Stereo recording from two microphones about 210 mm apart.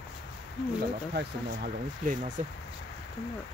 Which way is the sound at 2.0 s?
40° right (ahead or behind).